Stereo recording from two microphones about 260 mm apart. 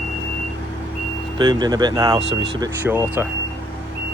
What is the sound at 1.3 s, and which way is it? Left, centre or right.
Speech, centre.